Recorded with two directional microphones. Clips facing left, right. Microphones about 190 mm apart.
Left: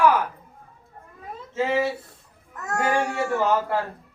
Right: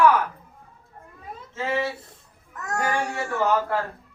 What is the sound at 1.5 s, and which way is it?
A man's voice, 15° left (ahead or behind).